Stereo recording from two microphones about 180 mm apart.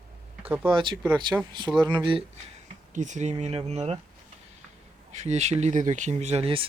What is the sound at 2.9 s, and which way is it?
Speech, 40° right (ahead or behind).